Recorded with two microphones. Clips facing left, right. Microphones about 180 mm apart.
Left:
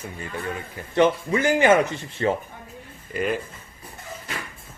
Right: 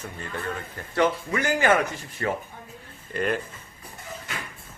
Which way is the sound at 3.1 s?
5° left (ahead or behind).